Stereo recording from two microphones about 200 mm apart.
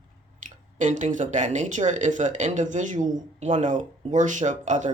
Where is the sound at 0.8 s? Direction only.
35° right (ahead or behind).